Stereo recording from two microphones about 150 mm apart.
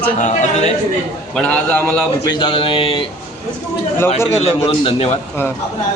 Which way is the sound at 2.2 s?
30° left (ahead or behind).